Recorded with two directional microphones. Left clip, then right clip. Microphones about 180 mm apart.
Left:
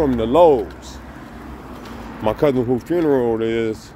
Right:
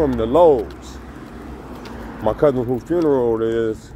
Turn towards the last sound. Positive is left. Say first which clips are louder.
# right 1 dB
turn(degrees=30)  # may be behind; listen again after turning